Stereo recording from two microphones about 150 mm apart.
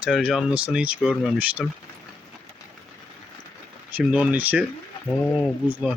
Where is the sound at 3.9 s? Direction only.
10° right (ahead or behind).